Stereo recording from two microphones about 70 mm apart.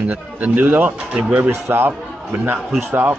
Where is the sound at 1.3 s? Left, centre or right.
Right.